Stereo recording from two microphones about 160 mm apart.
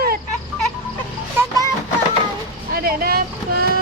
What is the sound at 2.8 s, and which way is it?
Speech, 70° right (ahead or behind).